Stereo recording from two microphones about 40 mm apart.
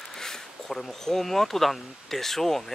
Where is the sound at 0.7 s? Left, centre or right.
Centre.